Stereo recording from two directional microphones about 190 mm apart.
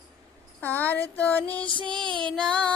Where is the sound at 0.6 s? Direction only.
10° left (ahead or behind).